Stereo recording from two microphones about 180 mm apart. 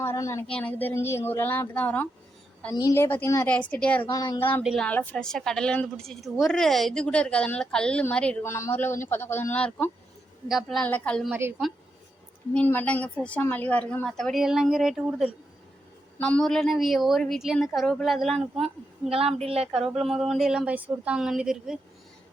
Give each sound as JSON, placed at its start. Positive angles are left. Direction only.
{"t": 0.0, "sound": "a woman's voice", "side_deg": 15}
{"t": 4.6, "sound": "a woman's voice", "side_deg": 0}
{"t": 11.3, "sound": "a woman's voice", "side_deg": -15}
{"t": 12.5, "sound": "a woman's voice", "side_deg": 10}
{"t": 19.1, "sound": "speech", "side_deg": -35}
{"t": 19.7, "sound": "a woman's voice", "side_deg": 0}